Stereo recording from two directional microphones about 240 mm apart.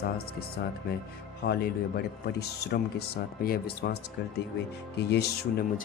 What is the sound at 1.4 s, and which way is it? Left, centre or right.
Speech, left.